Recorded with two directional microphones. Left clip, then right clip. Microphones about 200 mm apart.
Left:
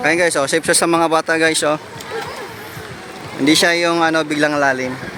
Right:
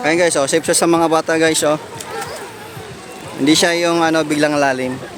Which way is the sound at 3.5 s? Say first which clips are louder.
Even; 5° right (ahead or behind).